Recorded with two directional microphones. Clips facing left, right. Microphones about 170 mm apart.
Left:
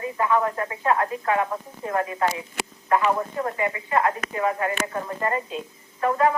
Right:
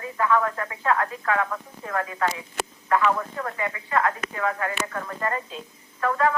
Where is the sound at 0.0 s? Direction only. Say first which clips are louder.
Left 1 dB; 20° left (ahead or behind).